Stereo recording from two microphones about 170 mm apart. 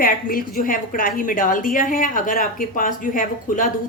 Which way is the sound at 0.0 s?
60° left (ahead or behind).